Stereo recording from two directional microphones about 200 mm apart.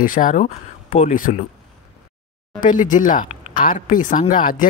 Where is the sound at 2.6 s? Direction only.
40° left (ahead or behind).